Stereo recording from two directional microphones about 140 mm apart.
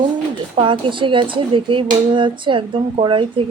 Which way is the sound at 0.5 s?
35° right (ahead or behind).